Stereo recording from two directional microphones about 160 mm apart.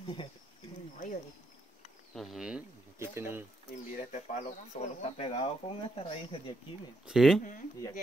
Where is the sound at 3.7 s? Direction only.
50° left (ahead or behind).